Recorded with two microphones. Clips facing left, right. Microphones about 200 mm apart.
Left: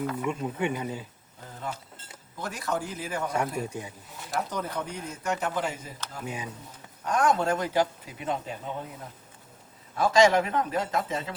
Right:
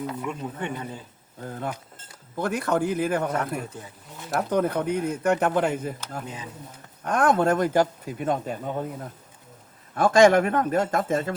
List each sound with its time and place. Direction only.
0.2 s speech: 5° left (ahead or behind)
1.5 s speech: 55° right (ahead or behind)
3.7 s speech: 15° left (ahead or behind)
4.3 s speech: 55° right (ahead or behind)
6.2 s speech: 10° left (ahead or behind)
7.0 s speech: 55° right (ahead or behind)
9.9 s speech: 50° right (ahead or behind)